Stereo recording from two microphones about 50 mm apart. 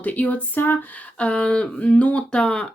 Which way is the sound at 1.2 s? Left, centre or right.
Left.